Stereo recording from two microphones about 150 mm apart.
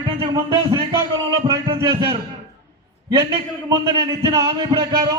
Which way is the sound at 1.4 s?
25° right (ahead or behind).